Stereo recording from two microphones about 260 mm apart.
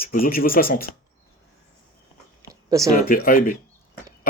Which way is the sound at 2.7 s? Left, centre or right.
Centre.